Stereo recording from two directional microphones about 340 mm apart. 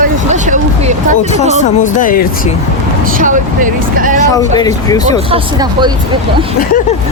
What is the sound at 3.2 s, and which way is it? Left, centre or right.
Speech, right.